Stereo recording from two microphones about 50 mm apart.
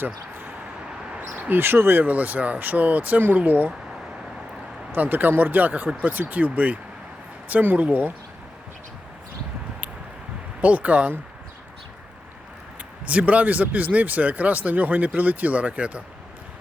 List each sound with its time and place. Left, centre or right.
0.0 s speech: right
4.9 s speech: right
10.6 s speech: right
13.1 s speech: right